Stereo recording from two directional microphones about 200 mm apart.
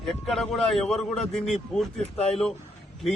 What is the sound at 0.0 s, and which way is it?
A man's voice, centre (ahead or behind).